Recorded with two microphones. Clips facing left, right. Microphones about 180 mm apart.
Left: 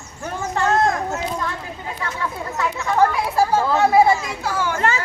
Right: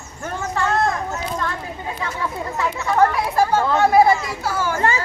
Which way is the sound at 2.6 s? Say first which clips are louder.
Even; centre (ahead or behind).